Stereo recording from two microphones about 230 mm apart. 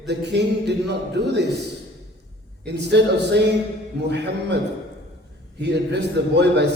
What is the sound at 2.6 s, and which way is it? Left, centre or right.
A man's voice, right.